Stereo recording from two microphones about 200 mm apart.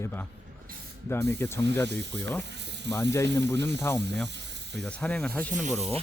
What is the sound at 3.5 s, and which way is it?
Speech, 15° left (ahead or behind).